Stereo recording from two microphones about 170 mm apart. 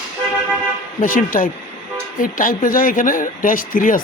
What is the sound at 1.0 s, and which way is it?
Speech, 50° left (ahead or behind).